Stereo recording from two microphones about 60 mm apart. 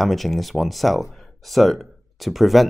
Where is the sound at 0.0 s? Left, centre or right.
Centre.